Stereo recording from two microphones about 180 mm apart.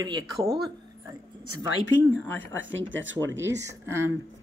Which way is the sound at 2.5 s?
90° right.